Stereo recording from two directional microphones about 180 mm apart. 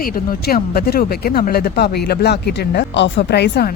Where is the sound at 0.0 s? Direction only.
55° left (ahead or behind).